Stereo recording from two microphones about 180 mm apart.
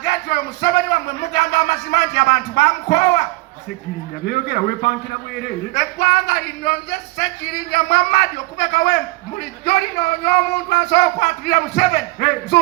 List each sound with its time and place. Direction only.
0.0 s a sound: 65° left (ahead or behind)
1.3 s music: 70° left (ahead or behind)
4.3 s a man's voice: 65° left (ahead or behind)